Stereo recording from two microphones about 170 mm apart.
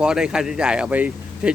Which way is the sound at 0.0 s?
5° right (ahead or behind).